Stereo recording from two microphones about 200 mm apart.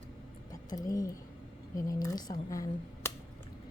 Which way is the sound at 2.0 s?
20° left (ahead or behind).